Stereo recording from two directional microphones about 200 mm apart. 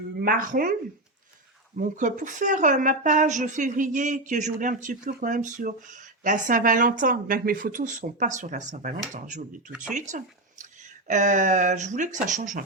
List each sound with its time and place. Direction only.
0.2 s speech: 45° right (ahead or behind)
1.8 s a woman's voice: 40° right (ahead or behind)